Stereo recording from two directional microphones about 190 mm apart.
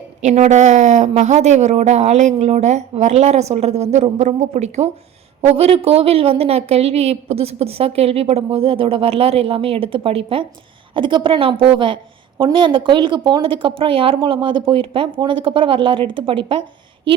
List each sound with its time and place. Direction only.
0.2 s a woman's voice: 40° right (ahead or behind)